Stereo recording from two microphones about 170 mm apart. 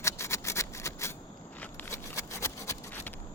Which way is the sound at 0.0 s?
15° left (ahead or behind).